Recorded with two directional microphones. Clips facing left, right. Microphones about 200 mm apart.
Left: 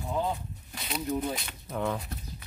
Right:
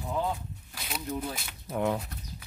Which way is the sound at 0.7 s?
Centre (ahead or behind).